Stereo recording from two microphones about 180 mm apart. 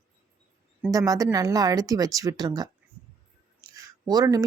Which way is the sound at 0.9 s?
20° right (ahead or behind).